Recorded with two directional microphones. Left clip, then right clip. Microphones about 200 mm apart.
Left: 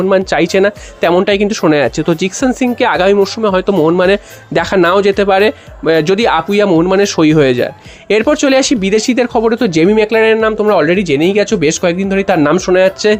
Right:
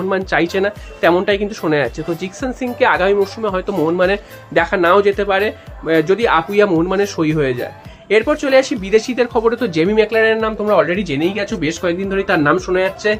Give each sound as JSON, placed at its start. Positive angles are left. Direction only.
{"t": 0.1, "sound": "speech", "side_deg": 40}